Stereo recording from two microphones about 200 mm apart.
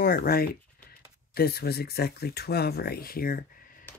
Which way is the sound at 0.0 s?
45° left (ahead or behind).